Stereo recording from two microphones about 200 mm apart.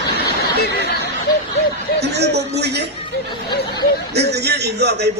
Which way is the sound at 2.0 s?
55° right (ahead or behind).